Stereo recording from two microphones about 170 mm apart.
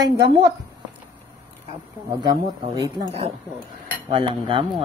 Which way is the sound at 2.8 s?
20° right (ahead or behind).